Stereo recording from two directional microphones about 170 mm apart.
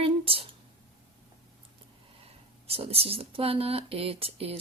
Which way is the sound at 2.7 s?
35° right (ahead or behind).